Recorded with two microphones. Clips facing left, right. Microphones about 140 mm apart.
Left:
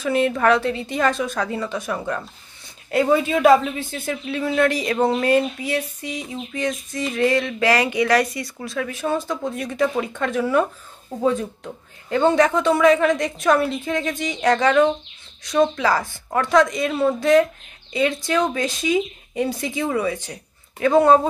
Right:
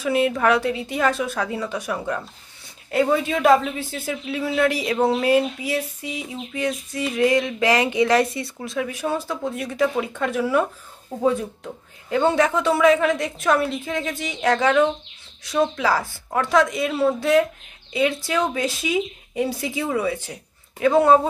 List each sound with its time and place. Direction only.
0.0 s a woman's voice: 5° right (ahead or behind)